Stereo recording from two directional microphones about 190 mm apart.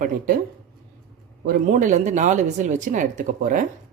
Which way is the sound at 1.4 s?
40° right (ahead or behind).